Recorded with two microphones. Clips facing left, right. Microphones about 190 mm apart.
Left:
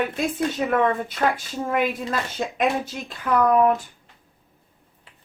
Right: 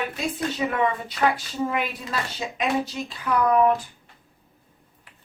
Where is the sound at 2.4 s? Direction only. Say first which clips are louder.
Left 2 dB; 50° left (ahead or behind).